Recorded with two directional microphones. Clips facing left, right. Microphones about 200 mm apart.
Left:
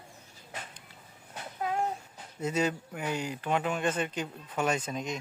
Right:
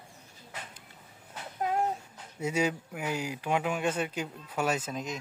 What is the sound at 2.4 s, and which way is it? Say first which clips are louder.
Speech: even; 10° right (ahead or behind).